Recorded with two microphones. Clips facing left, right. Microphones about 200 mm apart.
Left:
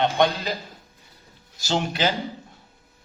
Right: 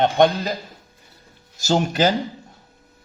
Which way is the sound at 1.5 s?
45° right (ahead or behind).